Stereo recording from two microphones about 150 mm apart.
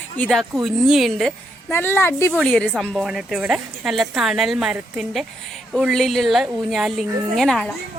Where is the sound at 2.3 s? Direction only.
5° left (ahead or behind).